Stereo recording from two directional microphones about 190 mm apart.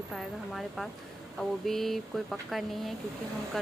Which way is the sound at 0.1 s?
Centre (ahead or behind).